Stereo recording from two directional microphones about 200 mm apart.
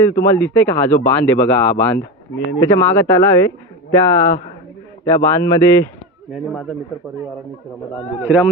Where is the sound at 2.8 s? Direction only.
10° left (ahead or behind).